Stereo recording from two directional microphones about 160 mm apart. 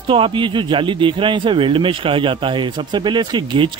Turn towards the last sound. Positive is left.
turn(degrees=-30)  # may be behind; listen again after turning